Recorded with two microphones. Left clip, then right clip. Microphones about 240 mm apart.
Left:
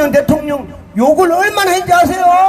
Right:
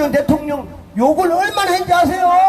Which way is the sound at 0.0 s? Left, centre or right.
Left.